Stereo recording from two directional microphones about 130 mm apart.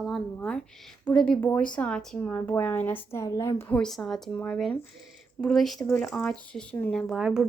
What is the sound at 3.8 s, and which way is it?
A woman's voice, centre (ahead or behind).